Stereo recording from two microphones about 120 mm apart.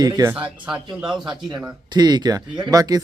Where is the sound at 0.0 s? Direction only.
30° right (ahead or behind).